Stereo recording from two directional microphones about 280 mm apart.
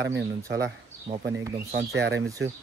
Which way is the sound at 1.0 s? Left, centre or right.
Right.